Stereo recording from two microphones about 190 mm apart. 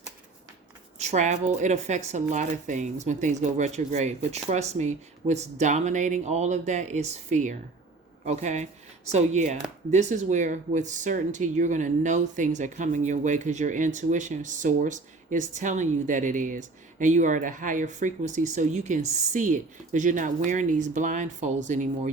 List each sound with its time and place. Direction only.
0.9 s speech: 35° right (ahead or behind)